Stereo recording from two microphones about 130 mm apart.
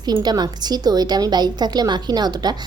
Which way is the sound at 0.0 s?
35° right (ahead or behind).